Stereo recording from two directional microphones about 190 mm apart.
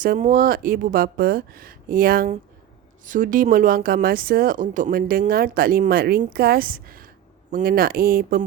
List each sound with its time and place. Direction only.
0.0 s speech: 45° right (ahead or behind)